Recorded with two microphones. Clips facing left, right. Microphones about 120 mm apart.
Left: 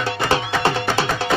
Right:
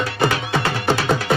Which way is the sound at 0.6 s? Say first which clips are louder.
Left 1 dB; 25° left (ahead or behind).